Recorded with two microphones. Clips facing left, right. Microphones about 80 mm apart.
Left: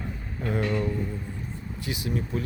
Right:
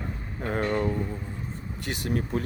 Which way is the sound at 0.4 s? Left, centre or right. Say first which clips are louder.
Right 1 dB; right.